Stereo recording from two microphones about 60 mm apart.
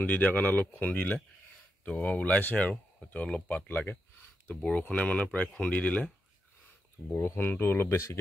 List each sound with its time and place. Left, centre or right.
0.0 s speech: left
4.6 s speech: centre
7.3 s speech: left